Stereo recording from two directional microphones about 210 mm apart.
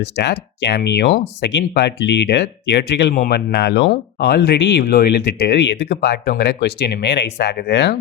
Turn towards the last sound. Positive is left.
turn(degrees=55)  # may be behind; listen again after turning